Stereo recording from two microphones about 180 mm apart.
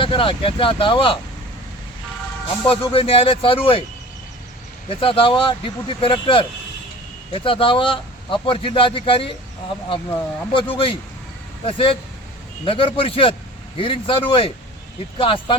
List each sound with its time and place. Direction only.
0.0 s a man's voice: 30° left (ahead or behind)
2.6 s speech: 30° left (ahead or behind)
4.9 s a man's voice: 30° left (ahead or behind)
10.5 s a man's voice: 30° left (ahead or behind)